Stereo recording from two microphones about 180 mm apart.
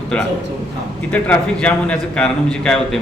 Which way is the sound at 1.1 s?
10° left (ahead or behind).